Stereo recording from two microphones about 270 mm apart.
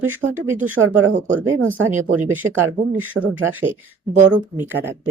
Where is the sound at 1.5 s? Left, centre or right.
Right.